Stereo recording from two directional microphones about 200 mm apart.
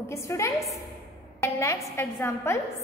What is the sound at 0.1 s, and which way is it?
A woman's voice, 15° left (ahead or behind).